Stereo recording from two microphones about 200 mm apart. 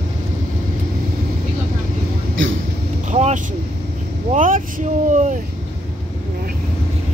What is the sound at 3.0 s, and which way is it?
Vehicle, 35° right (ahead or behind).